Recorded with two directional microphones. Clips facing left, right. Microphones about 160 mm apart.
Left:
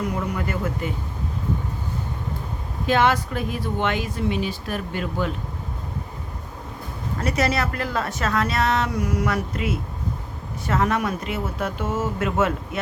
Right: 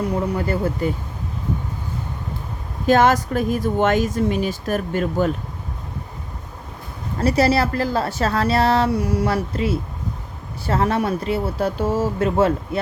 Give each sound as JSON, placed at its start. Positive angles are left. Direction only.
{"t": 0.0, "sound": "a woman's voice", "side_deg": -30}
{"t": 2.8, "sound": "speech", "side_deg": -40}
{"t": 7.2, "sound": "a woman's voice", "side_deg": -30}